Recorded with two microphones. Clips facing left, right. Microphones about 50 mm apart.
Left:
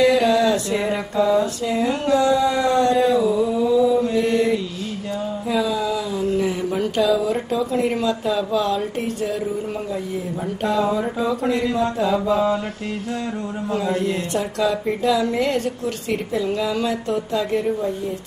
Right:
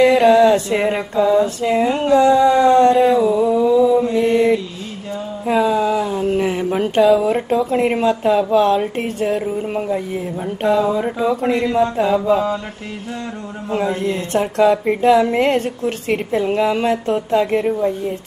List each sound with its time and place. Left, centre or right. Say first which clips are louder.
0.0 s a woman's voice: right 5 dB; right
1.4 s a sound: right 5 dB; right
3.6 s mantra: right 2 dB; centre
4.3 s mantra: right 7 dB; right
5.5 s a sound: right 6 dB; right
11.0 s speech: right 4 dB; right
13.7 s a woman's voice: right 3 dB; right